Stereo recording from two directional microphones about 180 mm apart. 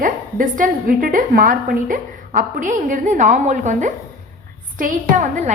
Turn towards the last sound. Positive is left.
turn(degrees=-45)  # may be behind; listen again after turning